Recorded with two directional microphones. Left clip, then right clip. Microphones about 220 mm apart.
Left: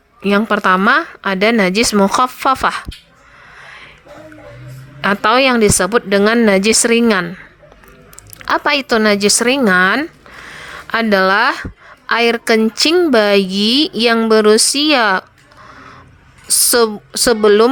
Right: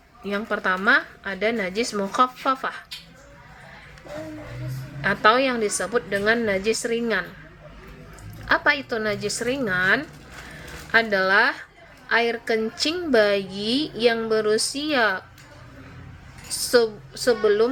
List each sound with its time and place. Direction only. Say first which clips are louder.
0.3 s speech: left 12 dB; 45° left (ahead or behind)
4.9 s speech: left 6 dB; 45° left (ahead or behind)
8.4 s speech: left 7 dB; 50° left (ahead or behind)
16.5 s speech: left 7 dB; 45° left (ahead or behind)